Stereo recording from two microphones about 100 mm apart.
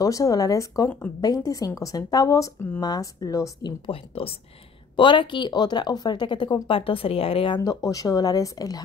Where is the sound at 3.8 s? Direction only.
70° left (ahead or behind).